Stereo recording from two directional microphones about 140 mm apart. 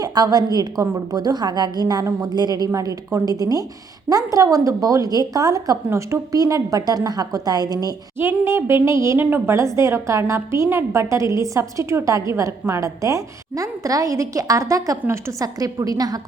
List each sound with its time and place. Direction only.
0.0 s a woman's voice: 25° right (ahead or behind)
8.2 s a woman's voice: 15° right (ahead or behind)